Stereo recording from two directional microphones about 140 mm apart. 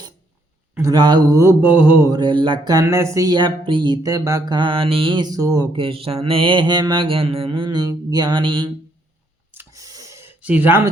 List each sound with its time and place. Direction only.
0.8 s speech: 30° right (ahead or behind); by 2.0 s 10° right (ahead or behind)
2.0 s mantra: 30° right (ahead or behind)
2.8 s speech: 20° right (ahead or behind)
5.7 s mantra: 40° right (ahead or behind)
9.5 s a sound: 20° right (ahead or behind)